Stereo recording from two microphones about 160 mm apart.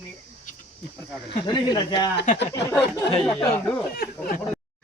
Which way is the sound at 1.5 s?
30° left (ahead or behind).